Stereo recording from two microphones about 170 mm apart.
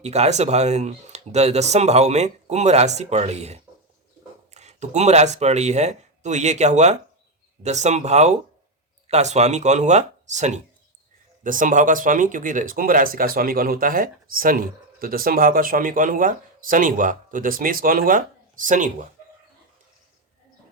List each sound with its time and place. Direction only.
0.0 s speech: 40° right (ahead or behind)